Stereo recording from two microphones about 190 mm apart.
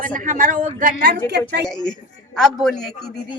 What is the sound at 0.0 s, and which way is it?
Speech, 45° right (ahead or behind).